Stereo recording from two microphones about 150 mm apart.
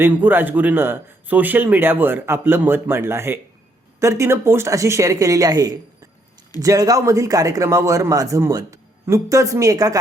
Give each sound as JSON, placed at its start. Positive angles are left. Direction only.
{"t": 0.0, "sound": "speech", "side_deg": -10}